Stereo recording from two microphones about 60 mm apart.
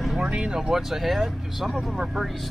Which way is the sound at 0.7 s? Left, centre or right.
Centre.